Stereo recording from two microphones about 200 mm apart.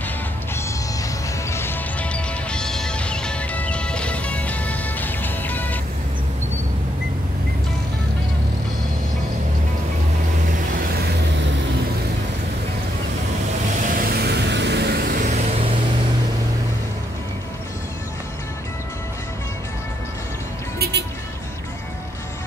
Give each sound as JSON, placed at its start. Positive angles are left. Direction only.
{"t": 1.5, "sound": "music", "side_deg": 10}
{"t": 13.7, "sound": "vehicle", "side_deg": -45}
{"t": 15.2, "sound": "vehicle", "side_deg": -35}